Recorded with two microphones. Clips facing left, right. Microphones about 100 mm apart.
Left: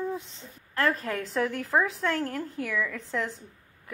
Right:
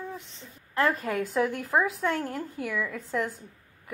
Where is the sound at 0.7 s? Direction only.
25° right (ahead or behind).